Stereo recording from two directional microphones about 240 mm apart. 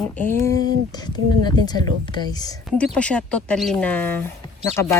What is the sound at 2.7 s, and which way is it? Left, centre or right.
Speech, centre.